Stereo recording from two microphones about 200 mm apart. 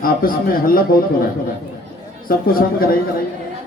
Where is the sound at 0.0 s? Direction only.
45° left (ahead or behind).